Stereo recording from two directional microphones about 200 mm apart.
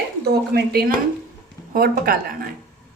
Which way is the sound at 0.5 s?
50° right (ahead or behind).